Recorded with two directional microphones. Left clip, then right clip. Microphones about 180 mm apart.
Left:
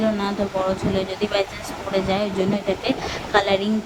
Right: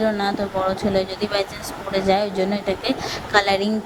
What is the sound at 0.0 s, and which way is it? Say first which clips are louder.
A woman's voice: right 2 dB; 25° right (ahead or behind).